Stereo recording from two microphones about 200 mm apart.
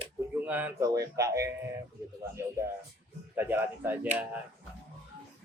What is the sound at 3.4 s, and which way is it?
Speech, 10° right (ahead or behind).